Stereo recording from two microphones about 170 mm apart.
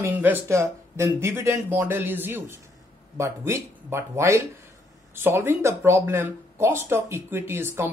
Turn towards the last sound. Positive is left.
turn(degrees=-15)  # may be behind; listen again after turning